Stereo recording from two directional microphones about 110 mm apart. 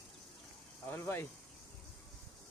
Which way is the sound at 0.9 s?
20° left (ahead or behind).